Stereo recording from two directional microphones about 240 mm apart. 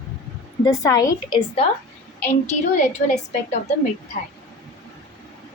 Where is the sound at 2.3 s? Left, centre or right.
Left.